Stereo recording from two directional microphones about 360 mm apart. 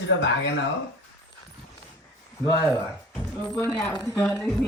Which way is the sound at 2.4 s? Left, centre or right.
Centre.